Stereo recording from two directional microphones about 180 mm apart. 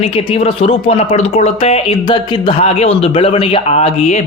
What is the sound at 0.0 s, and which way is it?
A man's voice, 35° left (ahead or behind).